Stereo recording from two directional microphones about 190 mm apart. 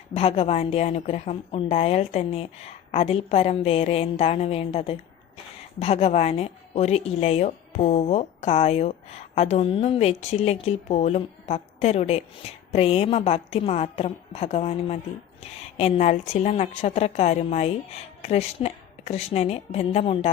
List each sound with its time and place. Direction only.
0.1 s speech: 30° left (ahead or behind)